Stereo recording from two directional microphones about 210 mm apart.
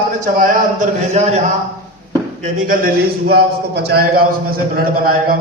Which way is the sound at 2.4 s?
40° right (ahead or behind).